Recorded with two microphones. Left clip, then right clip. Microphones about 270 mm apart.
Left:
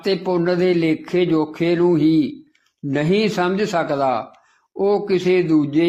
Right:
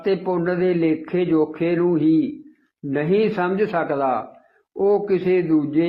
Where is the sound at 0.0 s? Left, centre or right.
Left.